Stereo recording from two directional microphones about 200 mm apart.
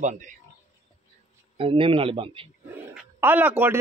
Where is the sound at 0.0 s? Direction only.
40° right (ahead or behind).